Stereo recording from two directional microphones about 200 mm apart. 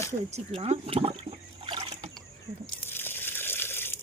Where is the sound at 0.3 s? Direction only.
30° right (ahead or behind).